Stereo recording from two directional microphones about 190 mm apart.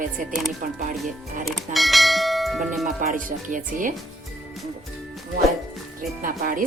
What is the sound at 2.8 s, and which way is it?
A woman's voice, 45° right (ahead or behind).